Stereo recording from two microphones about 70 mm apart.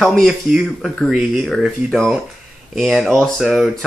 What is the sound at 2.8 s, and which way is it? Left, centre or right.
Speech, centre.